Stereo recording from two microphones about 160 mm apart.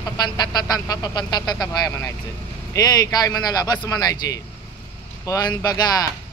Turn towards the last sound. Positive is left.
turn(degrees=25)  # may be behind; listen again after turning